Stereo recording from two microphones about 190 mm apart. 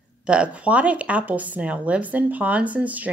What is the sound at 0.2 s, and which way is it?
Speech, 5° right (ahead or behind).